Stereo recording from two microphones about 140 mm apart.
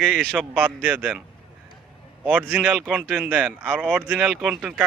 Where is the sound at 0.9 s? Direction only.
10° right (ahead or behind).